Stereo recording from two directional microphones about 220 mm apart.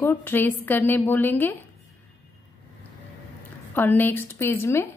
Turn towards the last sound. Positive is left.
turn(degrees=10)  # may be behind; listen again after turning